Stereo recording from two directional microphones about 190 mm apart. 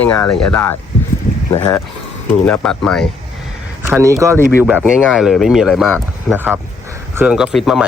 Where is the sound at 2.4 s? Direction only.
5° left (ahead or behind).